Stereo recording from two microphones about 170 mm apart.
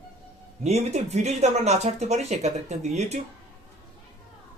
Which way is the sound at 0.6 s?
40° right (ahead or behind).